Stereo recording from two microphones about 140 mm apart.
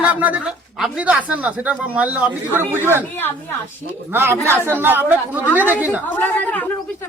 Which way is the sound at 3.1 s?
15° left (ahead or behind).